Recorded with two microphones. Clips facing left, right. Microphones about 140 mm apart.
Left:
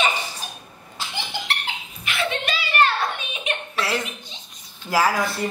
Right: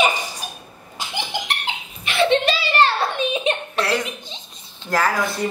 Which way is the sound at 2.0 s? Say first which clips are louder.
Right 9 dB; 30° right (ahead or behind).